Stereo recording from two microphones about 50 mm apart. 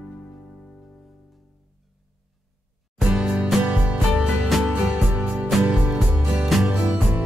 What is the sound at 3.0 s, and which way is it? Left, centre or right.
Music, centre.